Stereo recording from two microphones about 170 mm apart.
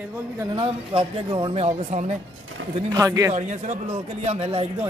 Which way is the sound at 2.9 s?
20° right (ahead or behind).